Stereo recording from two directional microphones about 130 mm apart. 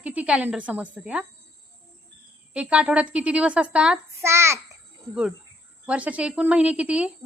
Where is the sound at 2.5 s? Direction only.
10° right (ahead or behind).